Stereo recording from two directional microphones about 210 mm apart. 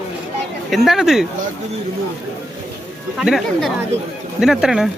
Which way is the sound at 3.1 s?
Centre (ahead or behind).